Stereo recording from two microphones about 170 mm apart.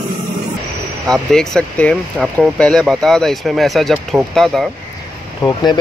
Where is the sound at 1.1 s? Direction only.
5° left (ahead or behind).